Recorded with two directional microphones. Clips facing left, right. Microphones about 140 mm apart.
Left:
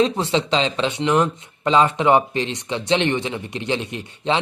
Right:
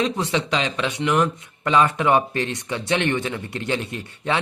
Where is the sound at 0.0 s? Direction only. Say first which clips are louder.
Left 4 dB; 25° left (ahead or behind).